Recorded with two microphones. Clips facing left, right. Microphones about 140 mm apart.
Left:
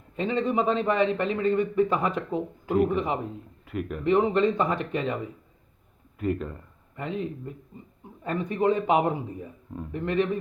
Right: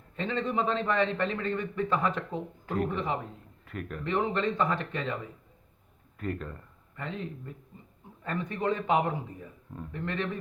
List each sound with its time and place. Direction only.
0.2 s a man's voice: 15° left (ahead or behind)